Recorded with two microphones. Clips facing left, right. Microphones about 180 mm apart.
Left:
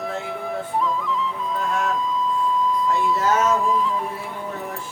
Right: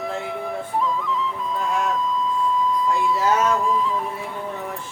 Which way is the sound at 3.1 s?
Centre (ahead or behind).